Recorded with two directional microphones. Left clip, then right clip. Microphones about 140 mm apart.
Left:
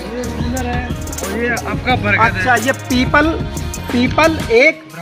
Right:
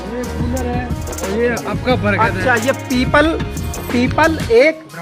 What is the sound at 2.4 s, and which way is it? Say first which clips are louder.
Speech: left 1 dB; 50° left (ahead or behind).